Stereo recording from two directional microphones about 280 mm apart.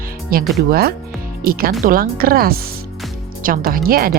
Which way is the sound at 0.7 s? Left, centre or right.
Right.